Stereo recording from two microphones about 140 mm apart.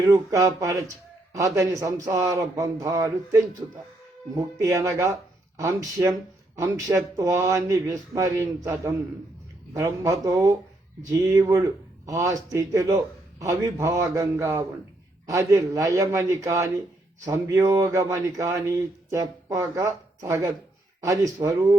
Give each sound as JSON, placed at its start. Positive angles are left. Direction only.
{"t": 0.1, "sound": "speech", "side_deg": -20}